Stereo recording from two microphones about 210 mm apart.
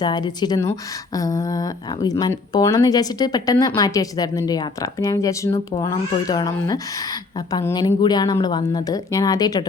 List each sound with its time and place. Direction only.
0.0 s a woman's voice: 20° left (ahead or behind)